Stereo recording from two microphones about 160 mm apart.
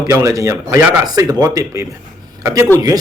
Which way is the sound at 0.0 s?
20° right (ahead or behind).